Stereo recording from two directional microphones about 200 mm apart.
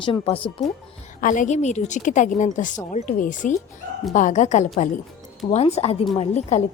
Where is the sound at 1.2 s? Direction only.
40° left (ahead or behind).